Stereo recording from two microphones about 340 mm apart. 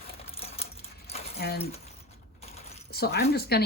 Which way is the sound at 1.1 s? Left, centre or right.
Left.